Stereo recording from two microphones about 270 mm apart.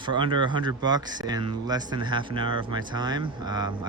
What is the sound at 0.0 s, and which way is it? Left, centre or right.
Speech, centre.